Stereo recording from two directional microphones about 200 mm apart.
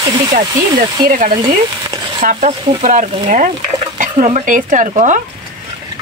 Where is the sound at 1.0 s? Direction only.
40° right (ahead or behind).